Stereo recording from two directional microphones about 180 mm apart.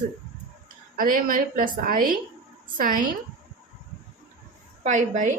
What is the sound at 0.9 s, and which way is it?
A woman's voice, 50° right (ahead or behind).